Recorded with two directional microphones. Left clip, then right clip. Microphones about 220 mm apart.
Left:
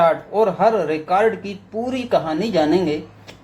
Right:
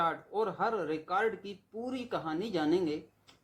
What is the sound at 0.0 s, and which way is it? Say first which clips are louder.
Speech: left 16 dB; 40° right (ahead or behind).